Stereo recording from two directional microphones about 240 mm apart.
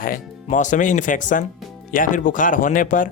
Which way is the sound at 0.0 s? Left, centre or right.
Left.